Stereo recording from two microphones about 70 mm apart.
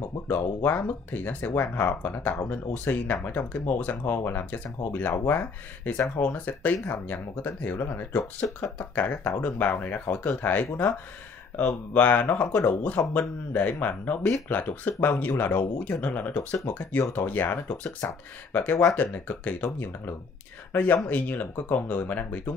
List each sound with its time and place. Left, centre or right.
0.3 s speech: left